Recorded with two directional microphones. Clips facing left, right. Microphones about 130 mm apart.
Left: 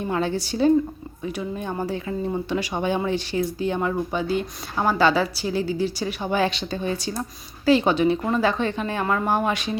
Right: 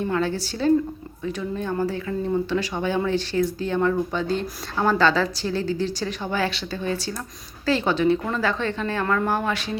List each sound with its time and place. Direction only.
0.0 s speech: 20° left (ahead or behind)